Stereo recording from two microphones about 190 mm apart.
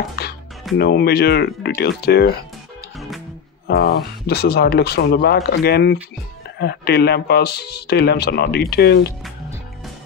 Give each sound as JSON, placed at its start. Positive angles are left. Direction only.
{"t": 0.1, "sound": "music", "side_deg": 55}
{"t": 0.7, "sound": "speech", "side_deg": 60}
{"t": 3.7, "sound": "speech", "side_deg": 60}